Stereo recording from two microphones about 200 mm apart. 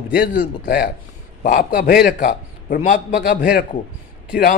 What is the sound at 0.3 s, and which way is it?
A man's voice, 45° left (ahead or behind).